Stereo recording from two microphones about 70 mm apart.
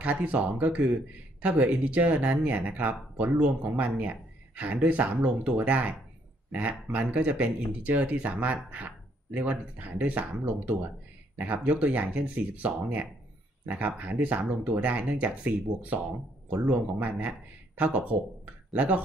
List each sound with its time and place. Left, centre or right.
0.0 s speech: right